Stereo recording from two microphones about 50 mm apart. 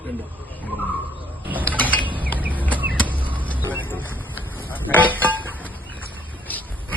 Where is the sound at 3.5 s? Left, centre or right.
Right.